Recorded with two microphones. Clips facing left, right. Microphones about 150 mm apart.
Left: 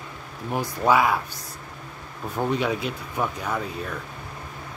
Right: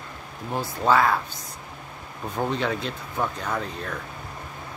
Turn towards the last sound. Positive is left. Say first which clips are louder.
# left 1 dB
turn(degrees=10)  # may be behind; listen again after turning